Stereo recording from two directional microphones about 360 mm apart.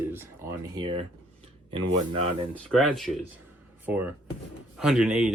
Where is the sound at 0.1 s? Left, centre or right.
Centre.